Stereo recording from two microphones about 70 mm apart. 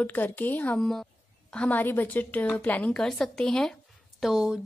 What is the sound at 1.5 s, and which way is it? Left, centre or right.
A woman's voice, centre.